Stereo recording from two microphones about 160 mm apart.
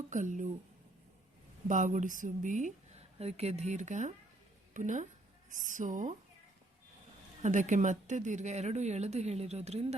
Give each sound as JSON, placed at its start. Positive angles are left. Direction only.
{"t": 0.1, "sound": "speech", "side_deg": -55}
{"t": 1.6, "sound": "a woman's voice", "side_deg": -50}
{"t": 7.4, "sound": "speech", "side_deg": -50}